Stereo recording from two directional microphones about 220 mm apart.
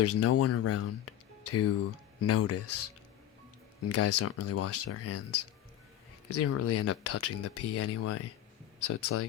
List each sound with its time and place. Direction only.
0.0 s speech: 90° left
3.8 s speech: 90° left